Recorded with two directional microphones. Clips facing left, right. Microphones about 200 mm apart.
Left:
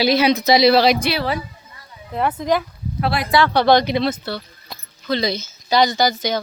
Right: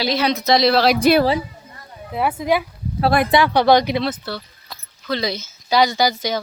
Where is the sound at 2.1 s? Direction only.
5° right (ahead or behind).